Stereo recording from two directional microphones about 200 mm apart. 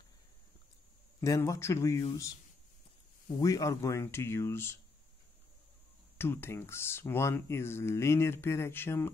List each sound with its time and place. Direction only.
1.2 s speech: 15° left (ahead or behind)
3.3 s speech: 15° left (ahead or behind)
6.1 s speech: 10° left (ahead or behind)